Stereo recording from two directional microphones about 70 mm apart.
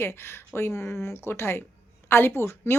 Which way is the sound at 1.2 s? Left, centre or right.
Left.